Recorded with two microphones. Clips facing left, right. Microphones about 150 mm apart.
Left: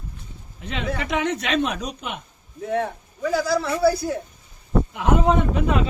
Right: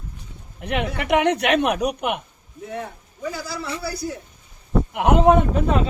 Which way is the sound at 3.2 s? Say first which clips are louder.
Left 8 dB; 90° left.